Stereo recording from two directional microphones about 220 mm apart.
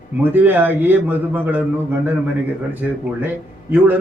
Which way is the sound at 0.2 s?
10° right (ahead or behind).